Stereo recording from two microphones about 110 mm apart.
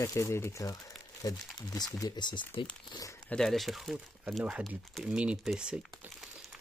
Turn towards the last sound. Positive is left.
turn(degrees=-10)  # may be behind; listen again after turning